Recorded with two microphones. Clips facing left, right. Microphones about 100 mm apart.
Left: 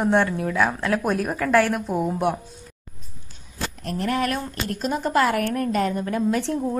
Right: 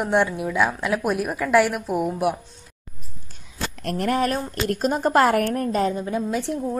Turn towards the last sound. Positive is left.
turn(degrees=-15)  # may be behind; listen again after turning